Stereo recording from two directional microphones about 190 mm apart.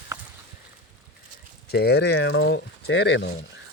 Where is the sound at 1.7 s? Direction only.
60° left (ahead or behind).